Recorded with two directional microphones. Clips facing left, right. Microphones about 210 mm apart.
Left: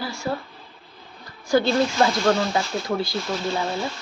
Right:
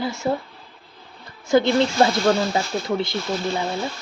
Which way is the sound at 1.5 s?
20° right (ahead or behind).